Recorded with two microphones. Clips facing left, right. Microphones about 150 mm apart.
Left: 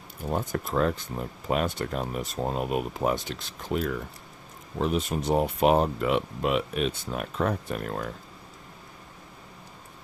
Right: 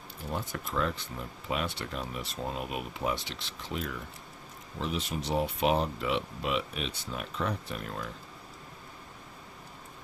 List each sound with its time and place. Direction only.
0.3 s speech: 45° left (ahead or behind)